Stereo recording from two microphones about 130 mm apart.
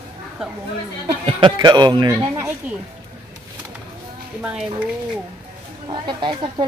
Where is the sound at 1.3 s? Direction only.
40° right (ahead or behind).